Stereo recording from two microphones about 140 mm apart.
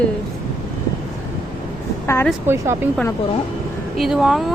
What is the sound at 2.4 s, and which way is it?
Speech, 20° right (ahead or behind).